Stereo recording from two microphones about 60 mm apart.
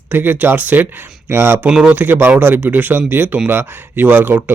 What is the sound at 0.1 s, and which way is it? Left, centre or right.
Speech, right.